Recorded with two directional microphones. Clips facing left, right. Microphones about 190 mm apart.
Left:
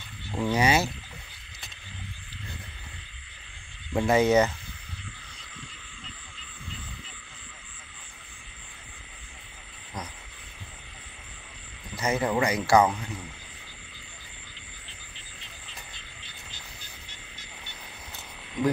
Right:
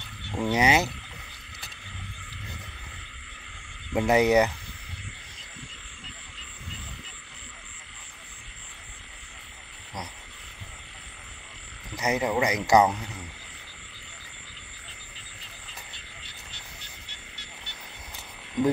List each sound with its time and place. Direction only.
0.5 s speech: 20° right (ahead or behind)
3.9 s speech: 15° right (ahead or behind)
12.0 s speech: 15° right (ahead or behind)
17.1 s frog: 70° right (ahead or behind)